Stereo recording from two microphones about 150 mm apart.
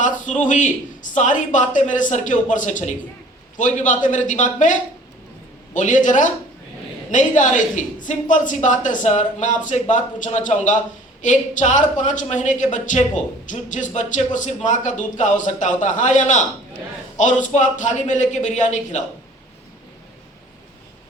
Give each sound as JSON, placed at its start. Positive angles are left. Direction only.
{"t": 0.0, "sound": "a woman's voice", "side_deg": 55}